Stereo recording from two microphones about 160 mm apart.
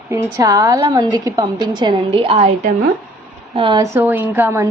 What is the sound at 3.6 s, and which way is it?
A woman's voice, 25° right (ahead or behind).